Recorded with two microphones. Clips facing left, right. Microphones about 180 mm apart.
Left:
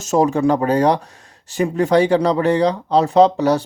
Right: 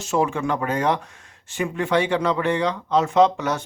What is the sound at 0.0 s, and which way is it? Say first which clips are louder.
Speech: left 7 dB; 40° left (ahead or behind).